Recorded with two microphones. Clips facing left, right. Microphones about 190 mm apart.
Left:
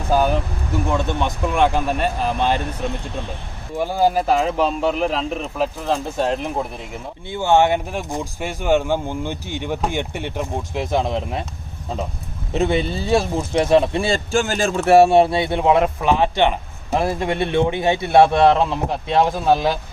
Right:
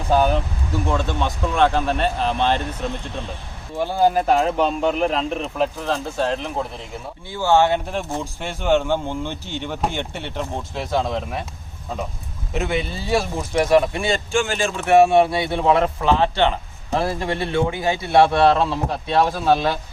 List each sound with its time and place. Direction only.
0.9 s speech: 15° left (ahead or behind)
3.8 s speech: 10° left (ahead or behind)
12.5 s speech: 30° left (ahead or behind); by 19.8 s 15° left (ahead or behind)